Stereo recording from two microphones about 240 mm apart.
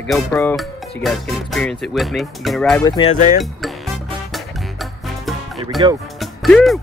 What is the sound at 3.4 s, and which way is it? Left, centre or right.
Music, centre.